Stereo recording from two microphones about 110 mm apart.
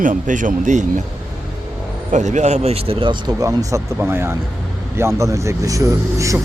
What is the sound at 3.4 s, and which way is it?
Speech, 30° right (ahead or behind).